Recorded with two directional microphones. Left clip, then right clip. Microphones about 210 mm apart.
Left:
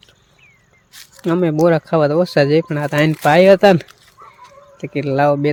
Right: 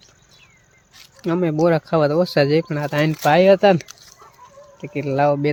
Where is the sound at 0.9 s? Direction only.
35° left (ahead or behind).